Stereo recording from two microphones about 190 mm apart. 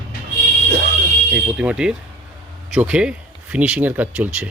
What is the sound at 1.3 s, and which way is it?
Speech, 5° right (ahead or behind).